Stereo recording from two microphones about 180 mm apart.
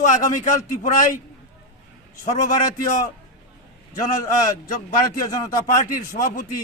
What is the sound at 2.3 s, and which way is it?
Speech, 45° left (ahead or behind).